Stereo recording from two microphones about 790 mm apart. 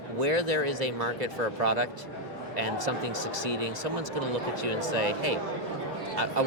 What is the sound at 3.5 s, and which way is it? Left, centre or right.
Speech, right.